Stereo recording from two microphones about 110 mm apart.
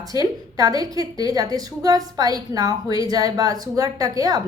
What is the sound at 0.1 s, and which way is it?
A woman's voice, 35° right (ahead or behind).